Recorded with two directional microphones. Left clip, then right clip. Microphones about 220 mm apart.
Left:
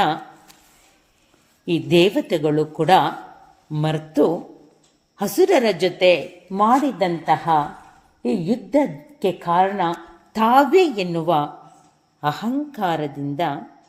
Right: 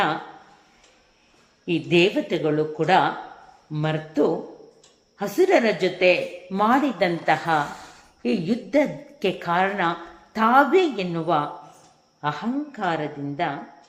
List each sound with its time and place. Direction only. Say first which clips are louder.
1.6 s a woman's voice: left 3 dB; 45° left (ahead or behind)